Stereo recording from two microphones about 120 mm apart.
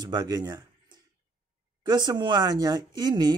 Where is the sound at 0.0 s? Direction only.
35° right (ahead or behind).